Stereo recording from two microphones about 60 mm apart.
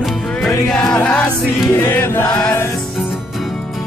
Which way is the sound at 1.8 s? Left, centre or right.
Left.